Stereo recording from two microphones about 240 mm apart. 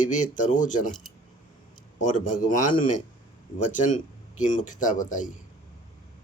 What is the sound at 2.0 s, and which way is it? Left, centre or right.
Speech, left.